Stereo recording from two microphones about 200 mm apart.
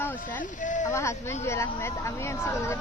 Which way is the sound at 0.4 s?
40° left (ahead or behind).